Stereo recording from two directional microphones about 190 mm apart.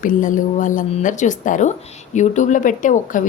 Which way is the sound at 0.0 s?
45° left (ahead or behind).